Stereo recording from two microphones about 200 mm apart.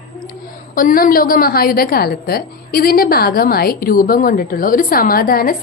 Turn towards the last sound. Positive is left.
turn(degrees=45)  # may be behind; listen again after turning